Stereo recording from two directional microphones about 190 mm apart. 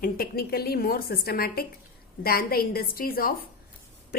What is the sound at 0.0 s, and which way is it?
A woman's voice, 55° left (ahead or behind).